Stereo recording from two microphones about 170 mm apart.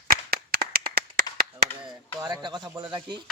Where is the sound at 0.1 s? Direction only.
70° right (ahead or behind).